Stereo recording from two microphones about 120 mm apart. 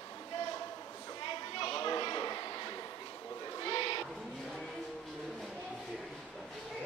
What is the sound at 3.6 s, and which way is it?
Owl, 50° left (ahead or behind).